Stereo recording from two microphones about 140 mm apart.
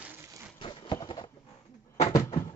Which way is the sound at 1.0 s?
40° left (ahead or behind).